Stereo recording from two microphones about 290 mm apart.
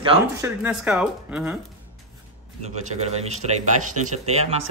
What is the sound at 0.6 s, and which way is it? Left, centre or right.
Speech, centre.